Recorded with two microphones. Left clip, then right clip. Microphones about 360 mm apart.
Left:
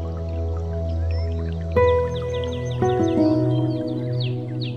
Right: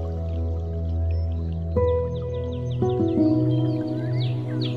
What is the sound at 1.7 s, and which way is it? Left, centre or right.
Music, left.